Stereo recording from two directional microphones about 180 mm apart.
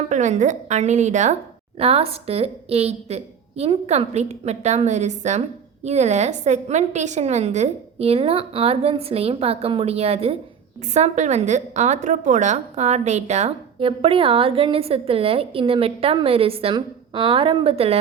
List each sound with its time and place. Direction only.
0.1 s a woman's voice: 45° right (ahead or behind)